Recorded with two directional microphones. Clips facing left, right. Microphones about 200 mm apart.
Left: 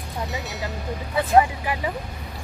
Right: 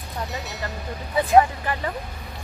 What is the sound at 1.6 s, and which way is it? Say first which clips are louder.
Speech: left 1 dB; 10° left (ahead or behind).